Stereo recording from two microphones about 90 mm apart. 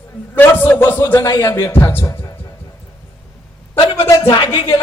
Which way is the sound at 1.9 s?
25° left (ahead or behind).